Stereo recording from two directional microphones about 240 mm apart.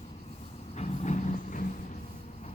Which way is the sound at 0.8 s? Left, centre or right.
Left.